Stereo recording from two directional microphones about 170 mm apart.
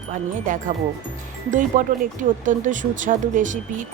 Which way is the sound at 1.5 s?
50° right (ahead or behind).